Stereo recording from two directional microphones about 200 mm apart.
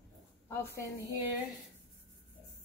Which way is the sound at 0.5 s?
15° left (ahead or behind).